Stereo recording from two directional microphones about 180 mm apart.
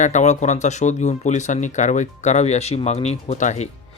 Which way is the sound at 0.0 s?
40° left (ahead or behind).